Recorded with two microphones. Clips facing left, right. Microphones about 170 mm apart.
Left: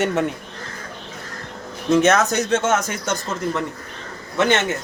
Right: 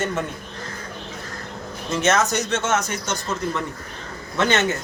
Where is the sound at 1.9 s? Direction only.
60° left (ahead or behind).